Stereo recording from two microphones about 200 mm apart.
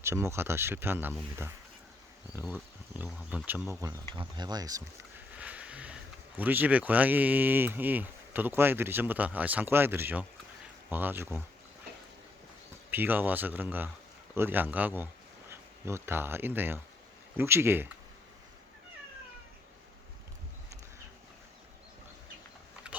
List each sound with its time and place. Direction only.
0.0 s speech: 15° right (ahead or behind)
2.3 s speech: 10° right (ahead or behind)
12.9 s speech: 10° right (ahead or behind)
22.8 s pig: 5° right (ahead or behind)